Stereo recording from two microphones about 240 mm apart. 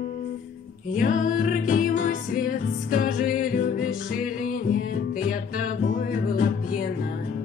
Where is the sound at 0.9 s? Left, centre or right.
Left.